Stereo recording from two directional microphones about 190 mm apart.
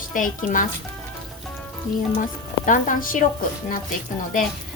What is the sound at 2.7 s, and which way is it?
A woman's voice, 45° left (ahead or behind).